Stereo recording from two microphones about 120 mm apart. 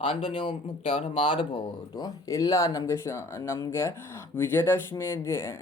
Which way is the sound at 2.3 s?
25° left (ahead or behind).